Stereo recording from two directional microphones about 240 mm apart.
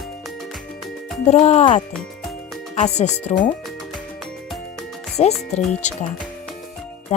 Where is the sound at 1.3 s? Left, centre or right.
Left.